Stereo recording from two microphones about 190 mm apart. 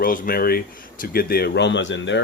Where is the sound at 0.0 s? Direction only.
50° left (ahead or behind).